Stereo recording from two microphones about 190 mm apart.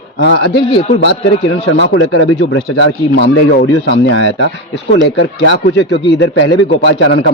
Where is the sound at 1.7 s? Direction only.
80° left.